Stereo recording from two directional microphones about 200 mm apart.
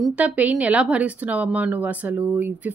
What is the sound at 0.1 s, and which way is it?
A woman's voice, 5° right (ahead or behind).